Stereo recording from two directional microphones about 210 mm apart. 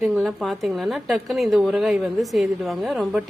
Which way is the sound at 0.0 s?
Centre (ahead or behind).